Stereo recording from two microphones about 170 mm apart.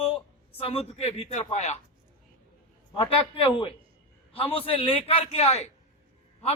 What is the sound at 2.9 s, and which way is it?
Speech, 30° left (ahead or behind).